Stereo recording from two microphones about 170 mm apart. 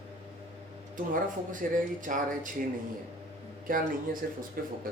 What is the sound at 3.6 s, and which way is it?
Speech, 55° right (ahead or behind).